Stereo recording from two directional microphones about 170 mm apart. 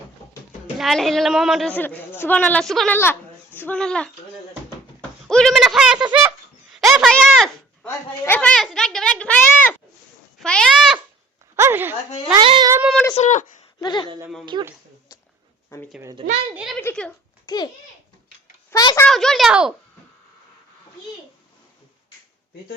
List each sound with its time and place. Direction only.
0.8 s a woman's voice: centre (ahead or behind)
6.7 s a sound: centre (ahead or behind)
7.9 s a woman's voice: 10° left (ahead or behind)
11.5 s speech: 15° right (ahead or behind)
12.4 s a child's voice: 30° right (ahead or behind)
13.1 s speech: 40° left (ahead or behind)
13.8 s speech: 25° left (ahead or behind)
14.5 s a child's voice: 30° right (ahead or behind)
15.7 s speech: 15° left (ahead or behind)
16.2 s a woman's voice: 90° right
16.6 s a woman's voice: centre (ahead or behind)
17.4 s babbling: 25° left (ahead or behind)
18.7 s a child's voice: 20° left (ahead or behind)
19.0 s a woman's voice: 5° left (ahead or behind)